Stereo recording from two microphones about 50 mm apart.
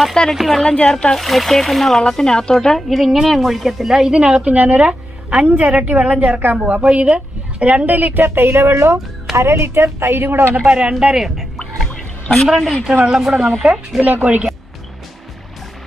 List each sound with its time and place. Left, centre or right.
0.1 s a woman's voice: centre
0.7 s a woman's voice: centre
1.2 s speech: centre
2.0 s a woman's voice: centre
2.9 s a woman's voice: centre; by 5.5 s right
5.6 s a woman's voice: right
6.5 s a woman's voice: right
8.4 s a man's voice: right
10.7 s a woman's voice: centre
11.1 s speech: centre
11.9 s music: centre
12.4 s speech: centre
14.2 s a woman's voice: right